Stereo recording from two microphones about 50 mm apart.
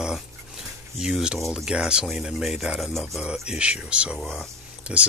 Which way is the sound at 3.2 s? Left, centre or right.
Right.